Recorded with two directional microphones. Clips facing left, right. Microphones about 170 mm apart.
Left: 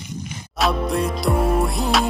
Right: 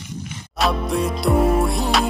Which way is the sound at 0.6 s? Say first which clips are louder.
Even; centre (ahead or behind).